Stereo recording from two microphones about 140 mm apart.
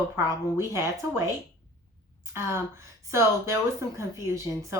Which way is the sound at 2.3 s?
20° right (ahead or behind).